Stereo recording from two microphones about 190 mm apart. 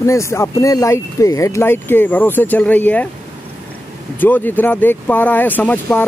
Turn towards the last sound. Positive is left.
turn(degrees=10)  # may be behind; listen again after turning